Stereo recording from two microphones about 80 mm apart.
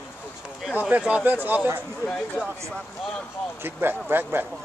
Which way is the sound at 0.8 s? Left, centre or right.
Centre.